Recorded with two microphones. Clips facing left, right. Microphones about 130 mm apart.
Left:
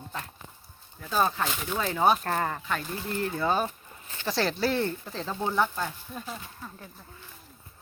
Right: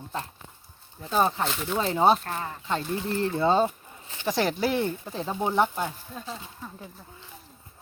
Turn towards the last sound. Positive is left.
turn(degrees=-5)  # may be behind; listen again after turning